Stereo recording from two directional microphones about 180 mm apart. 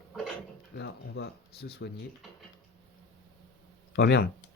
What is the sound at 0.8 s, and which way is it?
Speech, 65° left (ahead or behind).